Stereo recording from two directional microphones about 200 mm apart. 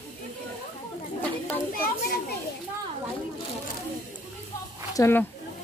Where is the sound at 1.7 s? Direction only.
45° left (ahead or behind).